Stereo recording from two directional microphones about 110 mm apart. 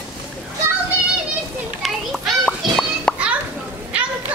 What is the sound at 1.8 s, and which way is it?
Children playing, centre (ahead or behind).